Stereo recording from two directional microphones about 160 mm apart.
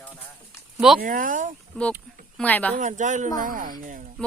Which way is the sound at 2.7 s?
50° right (ahead or behind).